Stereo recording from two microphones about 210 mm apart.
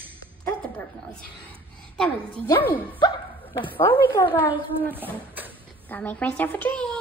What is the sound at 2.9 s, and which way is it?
Speech, 20° left (ahead or behind).